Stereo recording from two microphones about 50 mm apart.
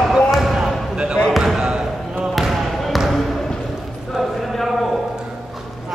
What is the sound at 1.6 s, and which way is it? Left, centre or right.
Basketball bounce, centre.